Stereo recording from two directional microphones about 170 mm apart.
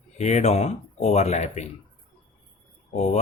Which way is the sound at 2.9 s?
40° left (ahead or behind).